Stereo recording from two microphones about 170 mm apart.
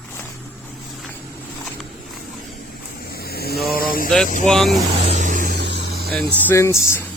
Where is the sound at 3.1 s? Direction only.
65° left (ahead or behind).